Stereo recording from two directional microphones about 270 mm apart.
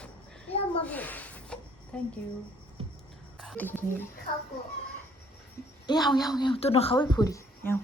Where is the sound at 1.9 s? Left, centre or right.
Centre.